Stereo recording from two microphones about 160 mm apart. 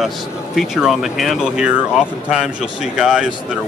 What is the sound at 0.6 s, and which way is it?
Speech, centre (ahead or behind).